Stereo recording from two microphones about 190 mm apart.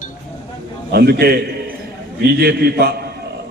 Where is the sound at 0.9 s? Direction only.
55° right (ahead or behind).